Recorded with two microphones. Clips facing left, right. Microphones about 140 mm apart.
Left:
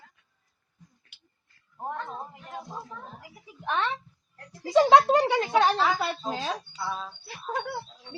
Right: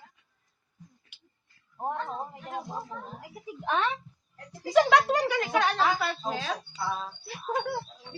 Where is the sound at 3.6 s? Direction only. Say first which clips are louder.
Right 1 dB; 15° right (ahead or behind).